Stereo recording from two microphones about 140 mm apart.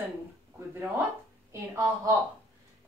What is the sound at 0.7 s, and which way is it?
Speech, 15° right (ahead or behind).